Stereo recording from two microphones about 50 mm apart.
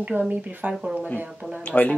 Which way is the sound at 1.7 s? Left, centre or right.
Left.